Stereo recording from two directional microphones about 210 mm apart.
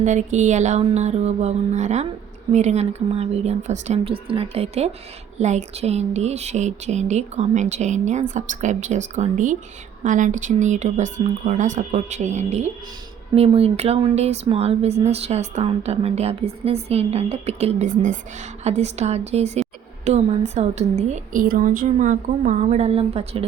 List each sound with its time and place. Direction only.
0.0 s speech: 35° right (ahead or behind)